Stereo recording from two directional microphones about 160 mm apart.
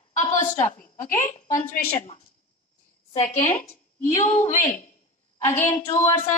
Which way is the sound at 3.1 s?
45° left (ahead or behind).